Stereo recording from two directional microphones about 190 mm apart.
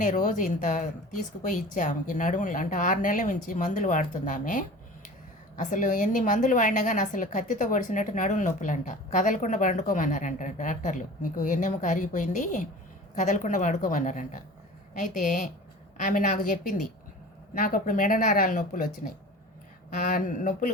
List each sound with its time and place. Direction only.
0.0 s a woman's voice: 40° left (ahead or behind)
20.0 s a woman's voice: 45° left (ahead or behind)